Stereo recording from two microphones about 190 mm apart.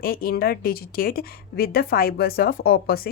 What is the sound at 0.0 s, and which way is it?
A woman's voice, 50° left (ahead or behind).